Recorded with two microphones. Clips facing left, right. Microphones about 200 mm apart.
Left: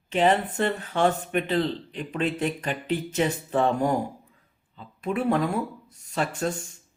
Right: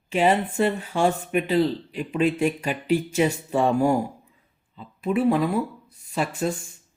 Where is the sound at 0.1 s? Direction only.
10° right (ahead or behind).